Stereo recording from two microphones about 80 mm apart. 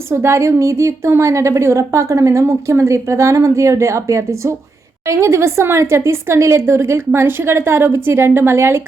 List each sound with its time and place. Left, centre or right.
0.1 s a woman's voice: right